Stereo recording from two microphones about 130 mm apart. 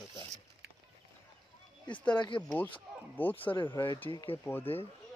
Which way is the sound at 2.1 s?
40° left (ahead or behind).